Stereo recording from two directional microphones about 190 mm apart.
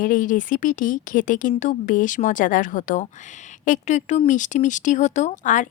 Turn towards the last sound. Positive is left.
turn(degrees=40)  # may be behind; listen again after turning